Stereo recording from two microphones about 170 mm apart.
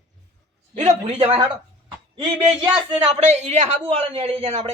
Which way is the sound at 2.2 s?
25° right (ahead or behind).